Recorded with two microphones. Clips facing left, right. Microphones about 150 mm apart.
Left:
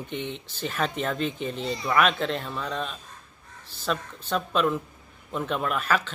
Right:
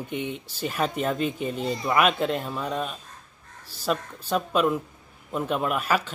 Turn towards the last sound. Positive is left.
turn(degrees=-10)  # may be behind; listen again after turning